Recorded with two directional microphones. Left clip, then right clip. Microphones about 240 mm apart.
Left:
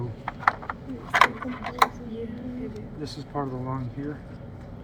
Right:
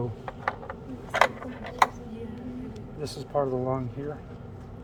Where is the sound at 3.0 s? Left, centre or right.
Right.